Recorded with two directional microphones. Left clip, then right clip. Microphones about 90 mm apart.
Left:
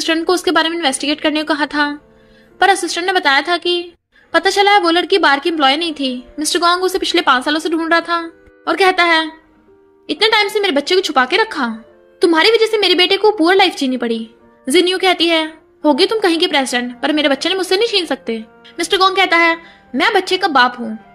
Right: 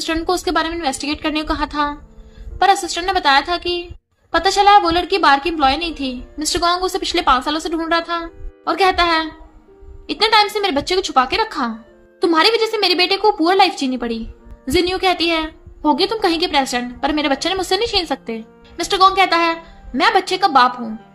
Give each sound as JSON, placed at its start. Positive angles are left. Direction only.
{"t": 0.0, "sound": "a woman's voice", "side_deg": 40}